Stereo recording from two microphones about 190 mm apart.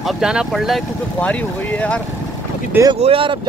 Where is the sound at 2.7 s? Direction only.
15° right (ahead or behind).